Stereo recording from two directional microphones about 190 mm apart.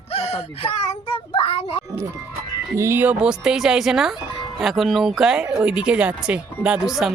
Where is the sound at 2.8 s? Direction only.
10° right (ahead or behind).